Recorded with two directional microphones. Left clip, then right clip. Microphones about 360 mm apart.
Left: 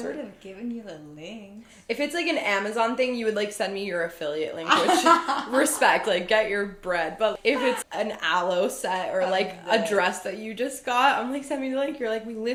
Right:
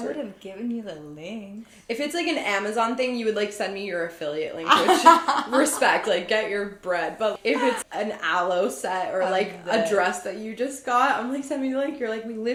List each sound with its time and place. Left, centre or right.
1.9 s a woman's voice: left
4.6 s speech: centre
5.5 s a woman's voice: left